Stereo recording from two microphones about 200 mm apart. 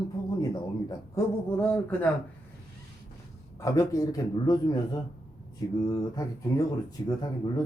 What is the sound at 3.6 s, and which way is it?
A man's voice, 15° left (ahead or behind).